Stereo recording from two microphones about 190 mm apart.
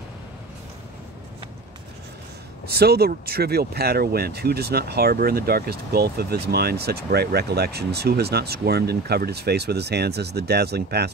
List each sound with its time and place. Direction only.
2.7 s speech: 55° right (ahead or behind)